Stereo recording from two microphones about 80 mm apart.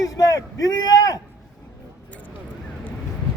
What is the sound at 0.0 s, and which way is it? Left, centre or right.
A man's voice, left.